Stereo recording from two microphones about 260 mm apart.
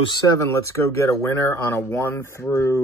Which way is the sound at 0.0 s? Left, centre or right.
Centre.